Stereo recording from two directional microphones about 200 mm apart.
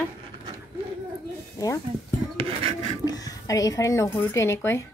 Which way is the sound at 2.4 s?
30° right (ahead or behind).